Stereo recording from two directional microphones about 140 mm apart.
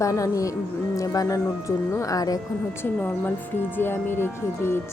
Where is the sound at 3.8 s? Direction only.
15° left (ahead or behind).